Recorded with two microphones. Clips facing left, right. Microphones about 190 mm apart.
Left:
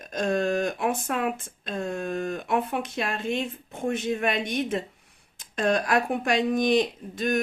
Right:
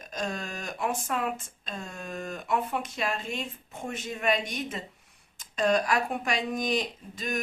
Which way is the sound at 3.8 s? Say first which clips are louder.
Left 4 dB; 50° left (ahead or behind).